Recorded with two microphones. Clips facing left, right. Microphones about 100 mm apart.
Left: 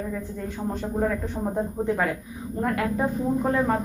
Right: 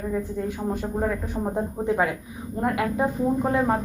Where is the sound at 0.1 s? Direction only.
15° right (ahead or behind).